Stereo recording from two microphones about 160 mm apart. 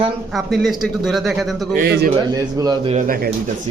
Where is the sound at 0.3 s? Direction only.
Centre (ahead or behind).